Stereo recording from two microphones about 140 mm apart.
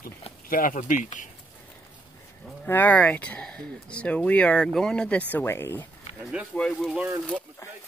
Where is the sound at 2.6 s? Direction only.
15° left (ahead or behind).